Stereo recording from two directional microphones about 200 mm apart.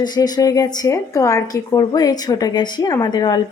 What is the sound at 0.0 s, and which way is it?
A woman's voice, 20° left (ahead or behind).